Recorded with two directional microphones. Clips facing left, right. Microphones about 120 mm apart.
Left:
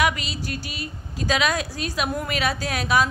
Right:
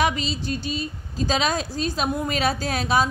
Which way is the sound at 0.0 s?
30° right (ahead or behind).